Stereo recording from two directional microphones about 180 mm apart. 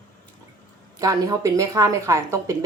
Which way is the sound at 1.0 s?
20° right (ahead or behind).